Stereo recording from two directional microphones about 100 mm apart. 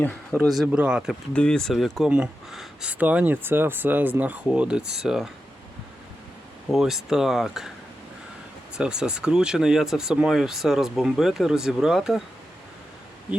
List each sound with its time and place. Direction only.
0.4 s speech: centre (ahead or behind)
1.3 s speech: 10° left (ahead or behind)
6.7 s speech: centre (ahead or behind)
8.7 s speech: 10° right (ahead or behind)